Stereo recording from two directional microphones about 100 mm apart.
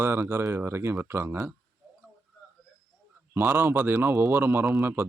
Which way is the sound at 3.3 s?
20° right (ahead or behind).